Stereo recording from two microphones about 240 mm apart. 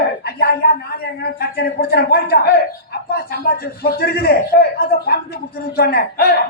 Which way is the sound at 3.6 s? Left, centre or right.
Left.